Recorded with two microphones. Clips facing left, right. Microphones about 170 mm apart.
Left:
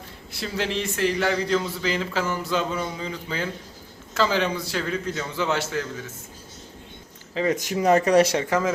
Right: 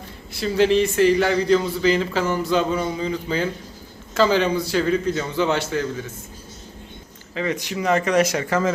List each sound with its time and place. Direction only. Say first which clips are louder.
0.3 s speech: right 10 dB; centre (ahead or behind)
7.3 s speech: left 1 dB; 40° left (ahead or behind)
8.4 s speech: right 2 dB; 15° left (ahead or behind)